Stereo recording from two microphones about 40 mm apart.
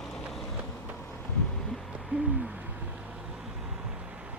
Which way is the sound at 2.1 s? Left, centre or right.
Right.